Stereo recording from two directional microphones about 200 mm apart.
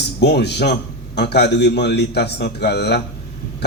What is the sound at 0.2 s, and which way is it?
A man's voice, 55° left (ahead or behind).